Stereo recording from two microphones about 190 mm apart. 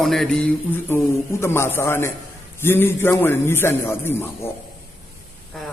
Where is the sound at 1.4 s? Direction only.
15° left (ahead or behind).